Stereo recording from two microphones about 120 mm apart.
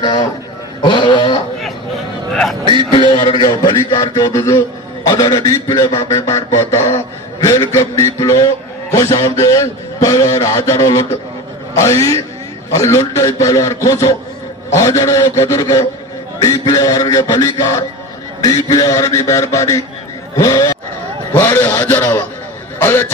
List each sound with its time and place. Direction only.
0.0 s a man's voice: 35° left (ahead or behind)
2.9 s a man's voice: 45° left (ahead or behind); by 23.1 s 20° left (ahead or behind)